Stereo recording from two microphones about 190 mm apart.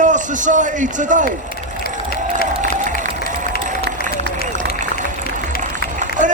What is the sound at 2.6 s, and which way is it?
Applause, 45° right (ahead or behind).